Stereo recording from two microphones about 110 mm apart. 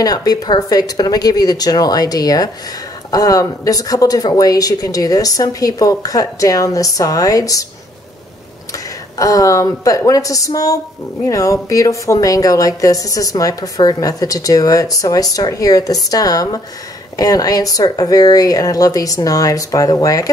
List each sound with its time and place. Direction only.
0.0 s a woman's voice: 35° left (ahead or behind)
8.7 s a woman's voice: 30° left (ahead or behind)